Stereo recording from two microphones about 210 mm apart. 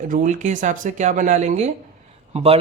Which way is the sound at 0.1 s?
35° right (ahead or behind).